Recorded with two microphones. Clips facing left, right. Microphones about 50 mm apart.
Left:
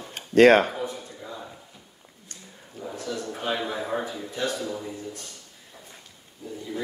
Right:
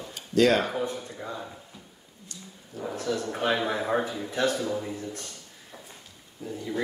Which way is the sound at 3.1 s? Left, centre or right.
Right.